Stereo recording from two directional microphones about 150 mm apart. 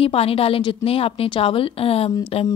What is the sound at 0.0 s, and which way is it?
Speech, 40° left (ahead or behind).